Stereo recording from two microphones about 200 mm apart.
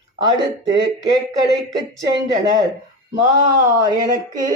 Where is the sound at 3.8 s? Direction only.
20° right (ahead or behind).